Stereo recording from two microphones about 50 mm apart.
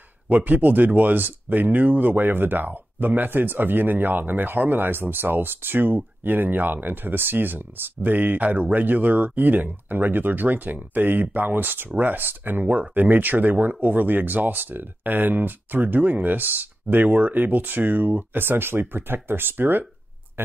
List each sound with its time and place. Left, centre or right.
0.3 s speech: right